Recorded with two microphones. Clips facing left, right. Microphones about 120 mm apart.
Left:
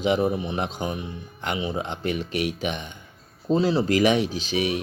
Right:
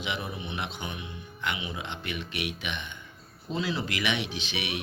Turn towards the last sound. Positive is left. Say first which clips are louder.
# left 9 dB
turn(degrees=40)  # may be behind; listen again after turning